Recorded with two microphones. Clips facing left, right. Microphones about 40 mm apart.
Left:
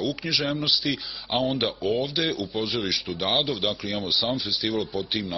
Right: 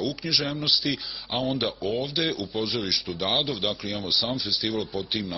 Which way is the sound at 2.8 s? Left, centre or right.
Centre.